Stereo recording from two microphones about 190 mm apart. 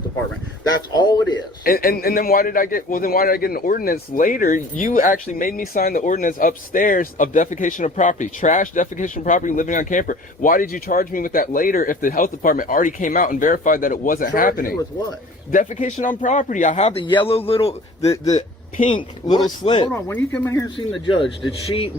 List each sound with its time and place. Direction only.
0.6 s a man's voice: 20° left (ahead or behind)
1.6 s a man's voice: 50° left (ahead or behind); by 19.9 s 25° left (ahead or behind)
19.9 s speech: 10° left (ahead or behind)